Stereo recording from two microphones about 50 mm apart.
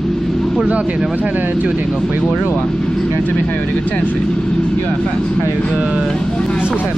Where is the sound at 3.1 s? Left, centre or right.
Left.